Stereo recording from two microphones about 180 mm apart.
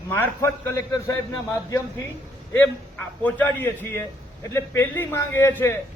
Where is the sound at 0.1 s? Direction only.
15° left (ahead or behind).